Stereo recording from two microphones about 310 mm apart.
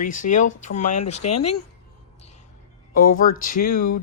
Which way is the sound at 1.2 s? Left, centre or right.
Left.